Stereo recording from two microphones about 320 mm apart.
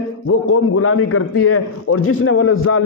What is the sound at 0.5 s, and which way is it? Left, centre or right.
A man's voice, left.